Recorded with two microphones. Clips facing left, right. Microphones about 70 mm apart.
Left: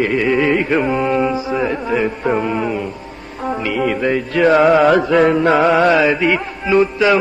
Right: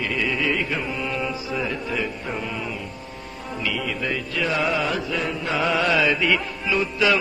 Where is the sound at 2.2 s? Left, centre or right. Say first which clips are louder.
Left 12 dB; left.